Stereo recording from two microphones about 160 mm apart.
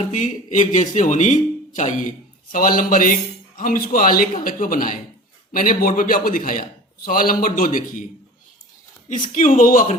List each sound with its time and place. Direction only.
0.0 s a man's voice: 50° left (ahead or behind)
9.0 s a man's voice: 50° left (ahead or behind)